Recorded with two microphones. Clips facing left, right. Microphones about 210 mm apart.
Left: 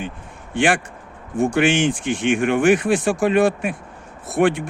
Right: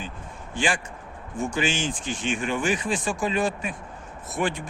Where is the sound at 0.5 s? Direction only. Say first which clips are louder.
Left 8 dB; 65° left (ahead or behind).